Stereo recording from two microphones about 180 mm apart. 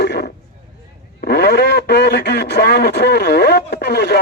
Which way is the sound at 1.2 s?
65° left (ahead or behind).